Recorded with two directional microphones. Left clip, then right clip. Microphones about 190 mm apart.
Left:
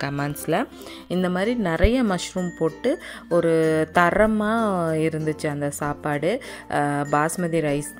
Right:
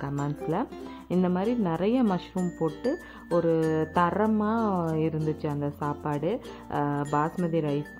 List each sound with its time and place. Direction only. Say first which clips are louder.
0.0 s speech: left 5 dB; 25° left (ahead or behind)